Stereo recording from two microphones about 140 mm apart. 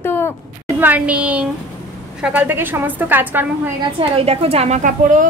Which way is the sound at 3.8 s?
40° right (ahead or behind).